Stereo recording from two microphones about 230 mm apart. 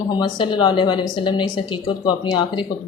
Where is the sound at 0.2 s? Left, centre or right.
Centre.